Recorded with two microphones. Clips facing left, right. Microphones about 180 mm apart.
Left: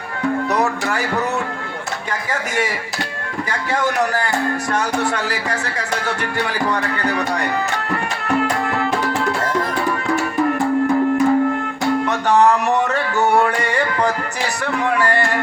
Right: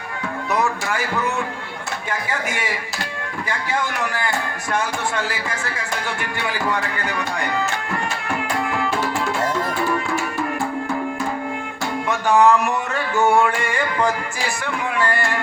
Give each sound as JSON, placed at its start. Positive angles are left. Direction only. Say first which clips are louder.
{"t": 0.5, "sound": "music", "louder": "left 2 dB", "side_deg": 40}
{"t": 3.5, "sound": "music", "louder": "left 4 dB", "side_deg": 40}
{"t": 12.0, "sound": "music", "louder": "right 1 dB", "side_deg": 40}